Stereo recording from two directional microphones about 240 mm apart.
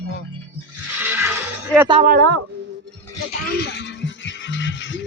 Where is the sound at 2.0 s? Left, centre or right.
Right.